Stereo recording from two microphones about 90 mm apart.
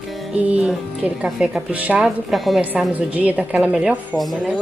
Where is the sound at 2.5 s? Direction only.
15° right (ahead or behind).